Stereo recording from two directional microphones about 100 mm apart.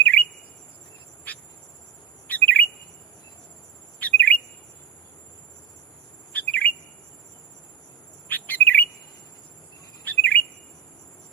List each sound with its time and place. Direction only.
0.0 s chirp: 15° left (ahead or behind)
2.2 s bird: 20° left (ahead or behind)
4.0 s bird: 15° left (ahead or behind)
6.3 s bird: 15° left (ahead or behind)
8.3 s chirp: 20° left (ahead or behind)
10.0 s chirp: 20° left (ahead or behind)